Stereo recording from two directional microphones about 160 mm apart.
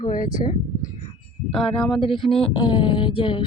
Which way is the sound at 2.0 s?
35° left (ahead or behind).